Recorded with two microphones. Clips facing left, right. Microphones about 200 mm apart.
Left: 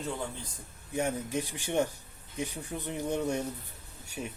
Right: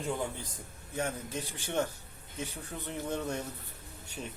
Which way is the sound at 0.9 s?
15° left (ahead or behind).